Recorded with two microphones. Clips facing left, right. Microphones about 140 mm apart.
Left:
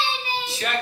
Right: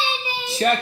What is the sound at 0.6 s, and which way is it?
Speech, 35° right (ahead or behind).